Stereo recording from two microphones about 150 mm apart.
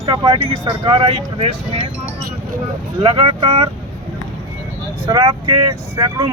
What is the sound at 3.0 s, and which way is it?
Speech, 35° right (ahead or behind).